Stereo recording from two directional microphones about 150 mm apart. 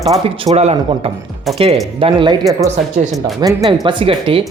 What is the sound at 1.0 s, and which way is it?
Speech, 40° right (ahead or behind).